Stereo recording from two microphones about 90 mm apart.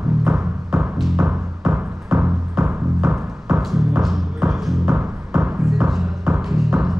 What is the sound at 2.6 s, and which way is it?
Music, 5° right (ahead or behind).